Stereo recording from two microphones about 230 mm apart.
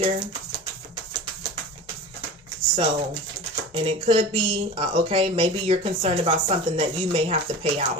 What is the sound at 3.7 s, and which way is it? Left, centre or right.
Speech, right.